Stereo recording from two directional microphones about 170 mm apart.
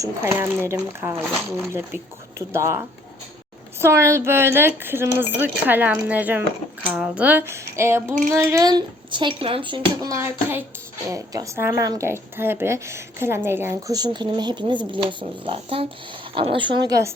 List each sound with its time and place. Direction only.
0.0 s a woman's voice: 15° right (ahead or behind)
2.5 s a woman's voice: 15° right (ahead or behind)